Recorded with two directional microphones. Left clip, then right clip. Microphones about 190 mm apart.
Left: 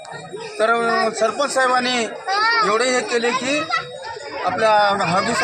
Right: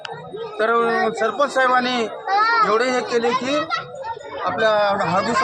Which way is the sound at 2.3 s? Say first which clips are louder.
Right 1 dB; 60° left (ahead or behind).